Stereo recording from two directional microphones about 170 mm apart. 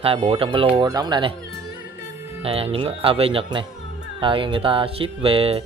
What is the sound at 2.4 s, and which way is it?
Speech, 35° right (ahead or behind).